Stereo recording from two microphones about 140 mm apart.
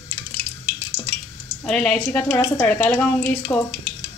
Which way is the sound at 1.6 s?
5° left (ahead or behind).